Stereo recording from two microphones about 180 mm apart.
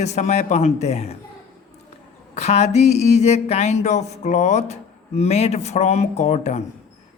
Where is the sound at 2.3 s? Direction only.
35° left (ahead or behind).